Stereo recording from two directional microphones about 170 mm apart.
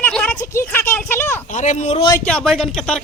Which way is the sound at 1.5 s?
45° left (ahead or behind).